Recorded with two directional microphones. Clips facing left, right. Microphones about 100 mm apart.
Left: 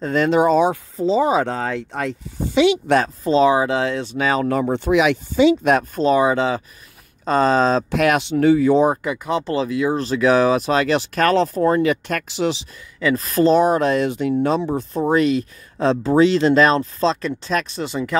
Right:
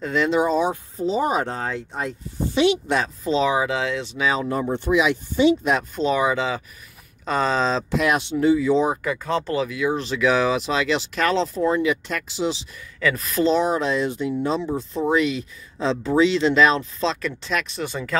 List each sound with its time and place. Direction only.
0.0 s speech: 45° left (ahead or behind); by 2.1 s 70° left (ahead or behind)
2.9 s speech: 45° left (ahead or behind)
4.5 s speech: 90° left
5.7 s speech: 45° left (ahead or behind)
8.9 s speech: 20° left (ahead or behind)
9.5 s speech: 30° left (ahead or behind); by 12.6 s 65° left (ahead or behind)
13.0 s speech: 35° left (ahead or behind); by 14.7 s 65° left (ahead or behind)
15.0 s speech: 45° left (ahead or behind)
17.8 s speech: 20° left (ahead or behind)